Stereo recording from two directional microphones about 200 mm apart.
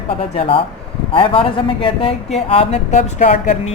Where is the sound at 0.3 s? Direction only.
25° left (ahead or behind).